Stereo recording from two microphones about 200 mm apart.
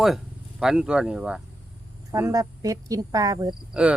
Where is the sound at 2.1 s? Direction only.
15° right (ahead or behind).